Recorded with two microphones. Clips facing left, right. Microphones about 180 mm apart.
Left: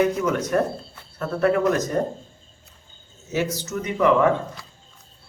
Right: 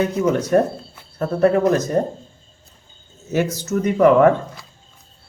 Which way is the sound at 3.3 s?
45° right (ahead or behind).